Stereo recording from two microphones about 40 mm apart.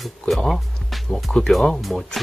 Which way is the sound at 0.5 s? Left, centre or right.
Centre.